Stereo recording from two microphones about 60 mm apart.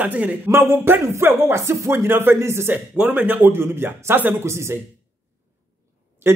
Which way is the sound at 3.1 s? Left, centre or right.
Right.